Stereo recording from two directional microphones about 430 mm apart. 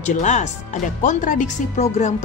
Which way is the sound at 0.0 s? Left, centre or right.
Centre.